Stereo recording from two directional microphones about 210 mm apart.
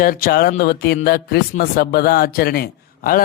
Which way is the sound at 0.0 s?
45° left (ahead or behind).